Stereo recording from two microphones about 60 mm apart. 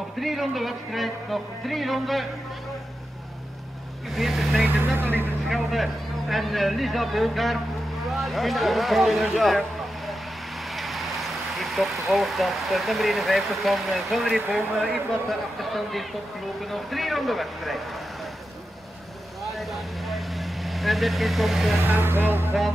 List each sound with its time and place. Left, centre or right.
0.2 s speech: centre
4.1 s speech: centre
4.6 s speech: right
5.5 s speech: centre
19.4 s vehicle: centre
21.8 s speech: right